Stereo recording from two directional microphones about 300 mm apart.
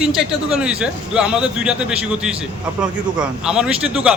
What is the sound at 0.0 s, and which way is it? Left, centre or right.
A man's voice, centre.